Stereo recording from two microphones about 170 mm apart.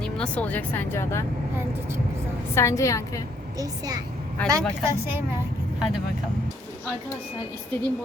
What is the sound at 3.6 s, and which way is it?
Speech, 20° right (ahead or behind).